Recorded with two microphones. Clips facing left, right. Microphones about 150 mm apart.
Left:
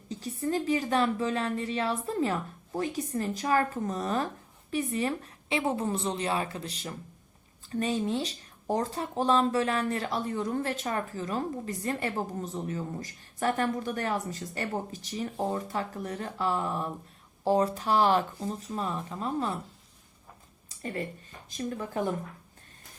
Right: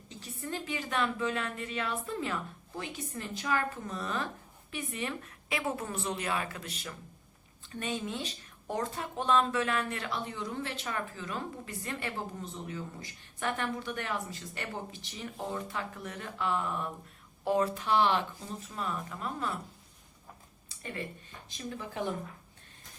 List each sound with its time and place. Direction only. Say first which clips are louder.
0.1 s speech: left 9 dB; 35° left (ahead or behind)
20.7 s a sound: left 5 dB; 40° left (ahead or behind)
21.6 s speech: left 6 dB; 45° left (ahead or behind)